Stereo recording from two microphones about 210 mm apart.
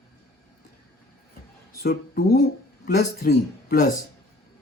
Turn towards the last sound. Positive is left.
turn(degrees=45)  # may be behind; listen again after turning